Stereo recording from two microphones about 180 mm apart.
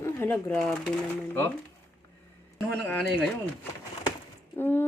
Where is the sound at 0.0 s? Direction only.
10° left (ahead or behind).